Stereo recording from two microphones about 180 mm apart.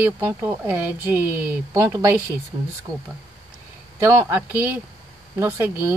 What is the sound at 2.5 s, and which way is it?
Speech, 30° right (ahead or behind).